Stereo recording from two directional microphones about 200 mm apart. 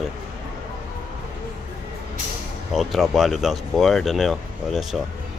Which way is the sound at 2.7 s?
Centre (ahead or behind).